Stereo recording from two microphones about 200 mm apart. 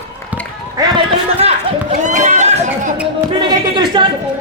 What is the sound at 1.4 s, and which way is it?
Speech, 30° right (ahead or behind).